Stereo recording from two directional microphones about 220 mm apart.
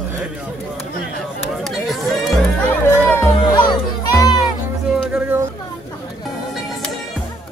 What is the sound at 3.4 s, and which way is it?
Music, 20° left (ahead or behind).